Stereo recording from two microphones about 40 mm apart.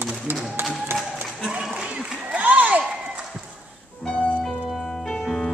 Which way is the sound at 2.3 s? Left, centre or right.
Right.